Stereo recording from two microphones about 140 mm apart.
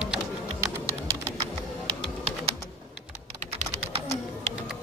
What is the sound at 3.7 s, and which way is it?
Typing, 50° right (ahead or behind).